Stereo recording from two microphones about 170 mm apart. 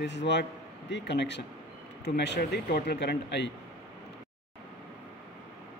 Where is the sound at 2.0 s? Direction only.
80° left.